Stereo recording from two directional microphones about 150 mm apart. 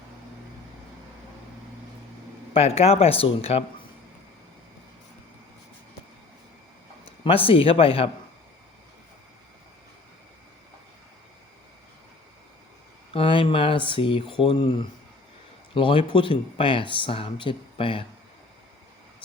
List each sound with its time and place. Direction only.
2.5 s speech: 40° left (ahead or behind)
7.3 s speech: 40° left (ahead or behind)
13.1 s speech: 40° left (ahead or behind)